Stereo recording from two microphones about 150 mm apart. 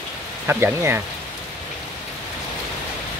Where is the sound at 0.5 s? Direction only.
15° right (ahead or behind).